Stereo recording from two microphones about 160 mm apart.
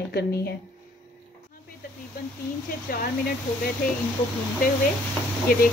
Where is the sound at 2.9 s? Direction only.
65° left (ahead or behind).